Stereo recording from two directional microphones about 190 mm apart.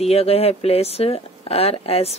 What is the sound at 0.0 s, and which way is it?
Speech, 30° left (ahead or behind).